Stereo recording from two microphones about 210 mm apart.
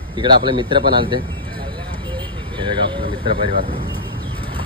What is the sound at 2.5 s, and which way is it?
Speech, 20° right (ahead or behind).